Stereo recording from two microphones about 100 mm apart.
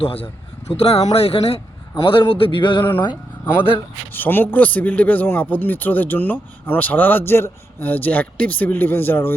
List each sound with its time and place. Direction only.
0.0 s speech: 70° left (ahead or behind)
2.0 s a sound: 55° left (ahead or behind)
4.1 s a man's voice: 20° left (ahead or behind)